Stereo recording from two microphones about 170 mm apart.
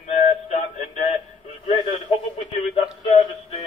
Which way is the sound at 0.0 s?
45° left (ahead or behind).